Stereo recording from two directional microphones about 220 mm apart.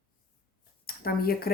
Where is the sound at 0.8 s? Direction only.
45° left (ahead or behind).